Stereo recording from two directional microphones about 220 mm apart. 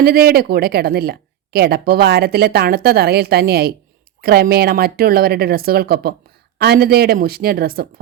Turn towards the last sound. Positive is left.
turn(degrees=-45)  # may be behind; listen again after turning